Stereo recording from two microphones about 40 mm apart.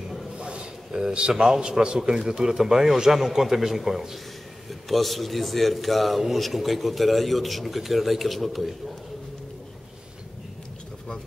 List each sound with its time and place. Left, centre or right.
0.4 s a sound: right
1.3 s a man's voice: centre
1.6 s a man's voice: right; by 8.7 s centre